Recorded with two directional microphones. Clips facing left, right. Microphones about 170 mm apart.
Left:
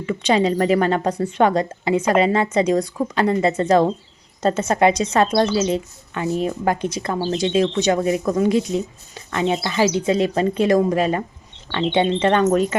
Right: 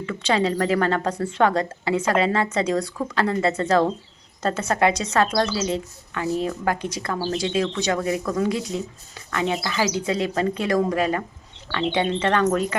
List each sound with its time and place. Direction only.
0.0 s speech: 15° left (ahead or behind)